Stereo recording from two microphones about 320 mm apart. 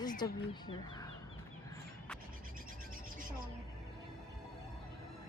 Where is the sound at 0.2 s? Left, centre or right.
Centre.